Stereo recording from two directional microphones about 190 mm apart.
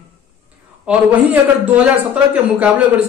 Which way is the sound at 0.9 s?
5° right (ahead or behind).